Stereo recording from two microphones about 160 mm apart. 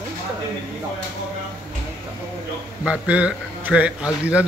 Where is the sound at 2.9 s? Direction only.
5° right (ahead or behind).